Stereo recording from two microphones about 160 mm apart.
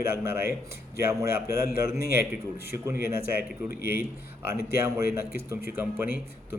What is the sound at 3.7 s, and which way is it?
Speech, 70° left (ahead or behind).